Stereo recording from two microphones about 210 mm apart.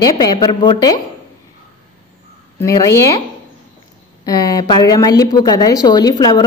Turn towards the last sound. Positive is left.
turn(degrees=20)  # may be behind; listen again after turning